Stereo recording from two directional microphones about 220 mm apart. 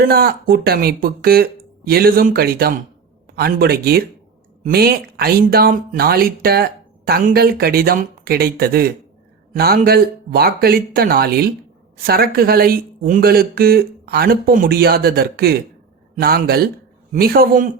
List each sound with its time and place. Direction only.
0.0 s a man's voice: 45° right (ahead or behind)